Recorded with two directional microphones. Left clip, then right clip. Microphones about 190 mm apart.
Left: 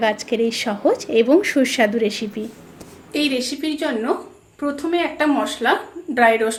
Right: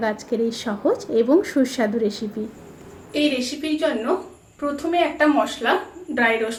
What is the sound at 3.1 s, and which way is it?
A woman's voice, 60° left (ahead or behind).